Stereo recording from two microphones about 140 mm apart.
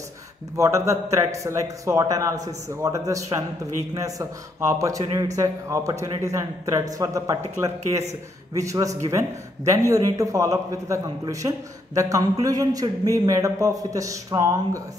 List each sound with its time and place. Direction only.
0.6 s a man's voice: 20° right (ahead or behind)